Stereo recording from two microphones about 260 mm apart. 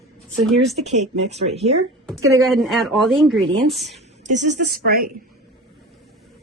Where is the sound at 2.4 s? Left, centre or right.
Centre.